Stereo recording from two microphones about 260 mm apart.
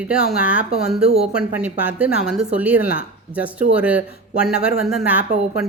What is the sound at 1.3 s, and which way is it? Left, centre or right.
Speech, centre.